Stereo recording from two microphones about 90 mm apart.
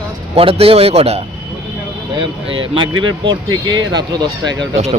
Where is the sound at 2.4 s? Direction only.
75° right (ahead or behind); by 4.2 s 50° right (ahead or behind).